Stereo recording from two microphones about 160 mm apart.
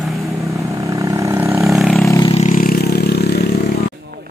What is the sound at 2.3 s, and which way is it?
Vehicle, 45° left (ahead or behind).